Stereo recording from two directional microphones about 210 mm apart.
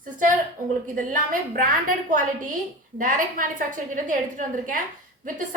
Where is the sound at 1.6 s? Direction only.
40° right (ahead or behind).